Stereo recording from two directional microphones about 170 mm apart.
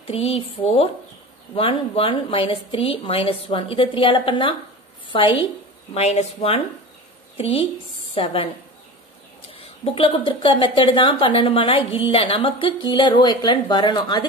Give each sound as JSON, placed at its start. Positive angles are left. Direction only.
{"t": 0.0, "sound": "a woman's voice", "side_deg": 35}
{"t": 9.5, "sound": "a woman's voice", "side_deg": 35}